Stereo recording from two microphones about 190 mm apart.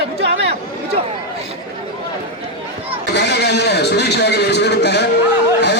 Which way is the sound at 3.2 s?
60° left (ahead or behind).